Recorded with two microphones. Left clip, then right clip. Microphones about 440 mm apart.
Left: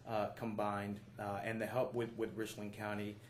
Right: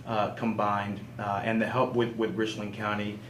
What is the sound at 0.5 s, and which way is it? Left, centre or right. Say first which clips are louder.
Speech: right 11 dB; left.